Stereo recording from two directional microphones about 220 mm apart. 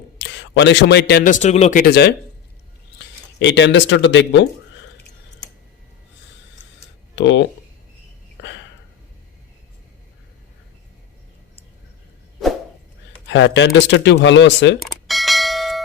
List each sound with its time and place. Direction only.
0.2 s a man's voice: 50° left (ahead or behind); by 1.8 s 30° left (ahead or behind)
1.8 s speech: 50° left (ahead or behind)
3.3 s speech: 55° left (ahead or behind)
7.2 s speech: 55° left (ahead or behind)
13.2 s speech: 60° left (ahead or behind)
14.8 s bell: centre (ahead or behind)